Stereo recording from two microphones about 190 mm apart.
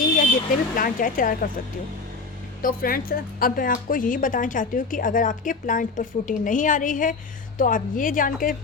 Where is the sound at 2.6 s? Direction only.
50° left (ahead or behind).